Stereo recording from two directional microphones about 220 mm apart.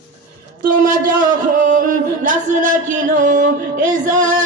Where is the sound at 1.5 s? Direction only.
35° right (ahead or behind).